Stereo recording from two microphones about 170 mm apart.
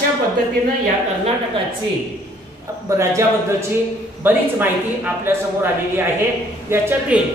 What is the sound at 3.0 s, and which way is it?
Speech, 15° right (ahead or behind).